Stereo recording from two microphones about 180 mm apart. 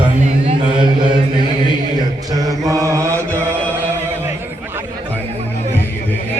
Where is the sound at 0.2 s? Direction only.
40° right (ahead or behind).